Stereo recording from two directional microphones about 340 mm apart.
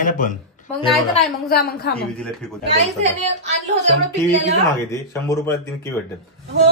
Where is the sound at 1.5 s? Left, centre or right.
Left.